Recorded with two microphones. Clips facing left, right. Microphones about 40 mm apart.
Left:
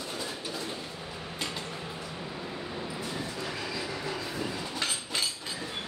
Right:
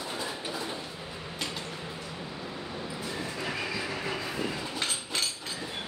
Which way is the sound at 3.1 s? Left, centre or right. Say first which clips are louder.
Right 1 dB; right.